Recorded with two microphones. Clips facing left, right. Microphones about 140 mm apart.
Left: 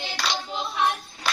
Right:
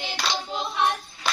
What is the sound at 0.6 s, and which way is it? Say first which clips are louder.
Hands: even; 20° right (ahead or behind).